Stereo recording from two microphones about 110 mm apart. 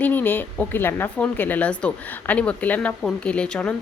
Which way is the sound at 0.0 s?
15° left (ahead or behind).